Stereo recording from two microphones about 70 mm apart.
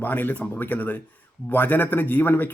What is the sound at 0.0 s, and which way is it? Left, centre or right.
A man's voice, left.